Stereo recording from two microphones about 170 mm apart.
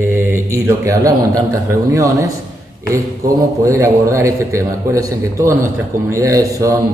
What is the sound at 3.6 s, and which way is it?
A man's voice, 15° right (ahead or behind).